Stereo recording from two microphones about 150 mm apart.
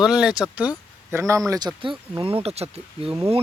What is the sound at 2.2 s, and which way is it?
Speech, 40° right (ahead or behind).